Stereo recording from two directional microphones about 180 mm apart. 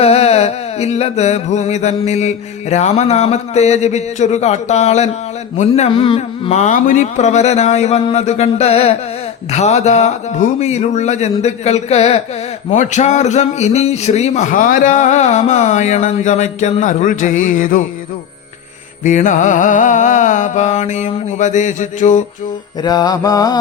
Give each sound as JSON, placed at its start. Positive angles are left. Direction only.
{"t": 0.0, "sound": "speech", "side_deg": 35}
{"t": 19.0, "sound": "music", "side_deg": 45}
{"t": 22.8, "sound": "mantra", "side_deg": 20}